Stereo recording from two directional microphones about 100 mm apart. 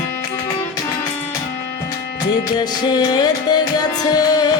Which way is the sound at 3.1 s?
45° left (ahead or behind).